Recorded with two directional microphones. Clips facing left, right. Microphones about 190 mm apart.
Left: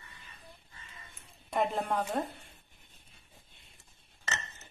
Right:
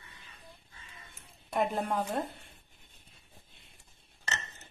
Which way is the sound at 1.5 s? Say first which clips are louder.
Even; centre (ahead or behind).